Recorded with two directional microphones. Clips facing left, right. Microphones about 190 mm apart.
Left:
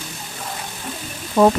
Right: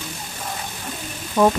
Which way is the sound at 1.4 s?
45° left (ahead or behind).